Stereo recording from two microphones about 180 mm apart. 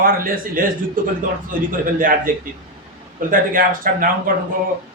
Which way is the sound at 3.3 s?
50° right (ahead or behind).